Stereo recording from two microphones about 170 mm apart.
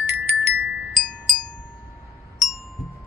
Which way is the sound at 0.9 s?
Centre (ahead or behind).